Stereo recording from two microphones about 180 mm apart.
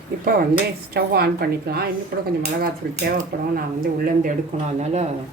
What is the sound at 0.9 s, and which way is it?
A woman's voice, 60° right (ahead or behind).